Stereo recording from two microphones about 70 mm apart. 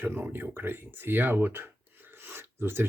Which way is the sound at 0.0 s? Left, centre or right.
Right.